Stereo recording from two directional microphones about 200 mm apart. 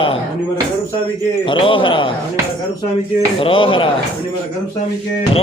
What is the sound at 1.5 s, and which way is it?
Speech, 25° left (ahead or behind).